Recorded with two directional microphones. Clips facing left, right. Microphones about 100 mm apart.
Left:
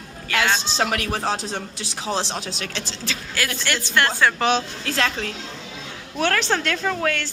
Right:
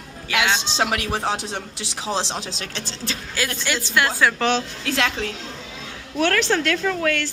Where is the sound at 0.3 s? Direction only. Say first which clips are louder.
Even; 15° right (ahead or behind); by 2.8 s 30° right (ahead or behind).